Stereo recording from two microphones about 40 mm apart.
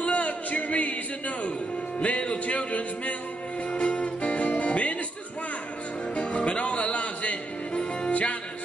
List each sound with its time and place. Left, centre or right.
0.0 s a sound: left
2.0 s music: left
6.1 s music: left